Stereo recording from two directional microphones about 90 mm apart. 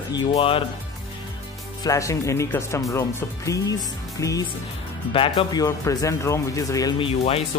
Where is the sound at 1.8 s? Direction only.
35° left (ahead or behind).